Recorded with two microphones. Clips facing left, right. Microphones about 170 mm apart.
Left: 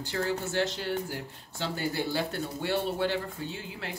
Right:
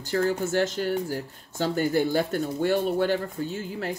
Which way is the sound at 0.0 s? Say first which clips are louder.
Right 6 dB; 45° right (ahead or behind).